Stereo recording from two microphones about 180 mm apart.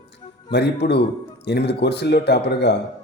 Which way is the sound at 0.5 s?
70° left (ahead or behind).